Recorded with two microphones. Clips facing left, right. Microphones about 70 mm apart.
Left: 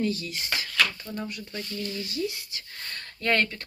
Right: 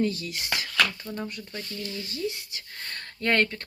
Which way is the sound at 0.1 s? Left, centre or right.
Right.